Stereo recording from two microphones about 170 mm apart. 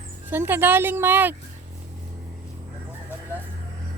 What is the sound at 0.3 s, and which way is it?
A woman's voice, 10° right (ahead or behind).